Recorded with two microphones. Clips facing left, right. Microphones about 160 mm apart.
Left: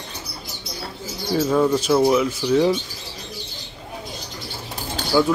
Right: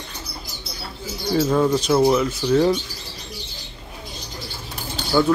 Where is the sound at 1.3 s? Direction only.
Centre (ahead or behind).